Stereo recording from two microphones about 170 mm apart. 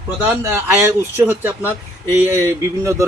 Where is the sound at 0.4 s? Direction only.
15° right (ahead or behind).